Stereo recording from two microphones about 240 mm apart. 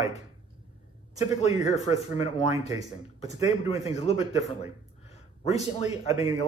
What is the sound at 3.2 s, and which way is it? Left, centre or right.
Speech, left.